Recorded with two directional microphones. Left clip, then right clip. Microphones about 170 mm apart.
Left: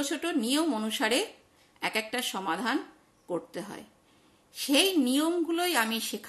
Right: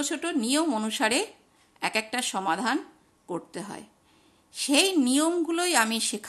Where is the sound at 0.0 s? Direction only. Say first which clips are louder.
Right 1 dB; 35° right (ahead or behind).